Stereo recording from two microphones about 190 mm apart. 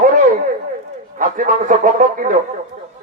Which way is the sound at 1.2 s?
40° right (ahead or behind).